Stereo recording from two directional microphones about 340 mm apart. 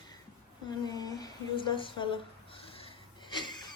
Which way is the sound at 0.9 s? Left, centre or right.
Centre.